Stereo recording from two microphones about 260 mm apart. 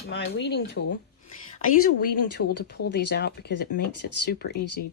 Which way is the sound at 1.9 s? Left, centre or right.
Left.